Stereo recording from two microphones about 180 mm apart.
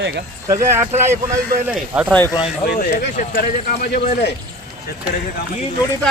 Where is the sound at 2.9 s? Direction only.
45° left (ahead or behind).